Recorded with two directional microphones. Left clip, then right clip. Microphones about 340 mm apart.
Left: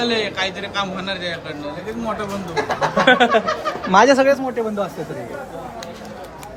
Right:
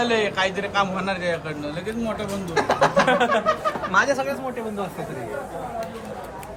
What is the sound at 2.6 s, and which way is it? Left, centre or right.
Speech, right.